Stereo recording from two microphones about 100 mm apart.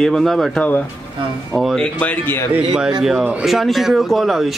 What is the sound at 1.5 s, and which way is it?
Speech, centre (ahead or behind).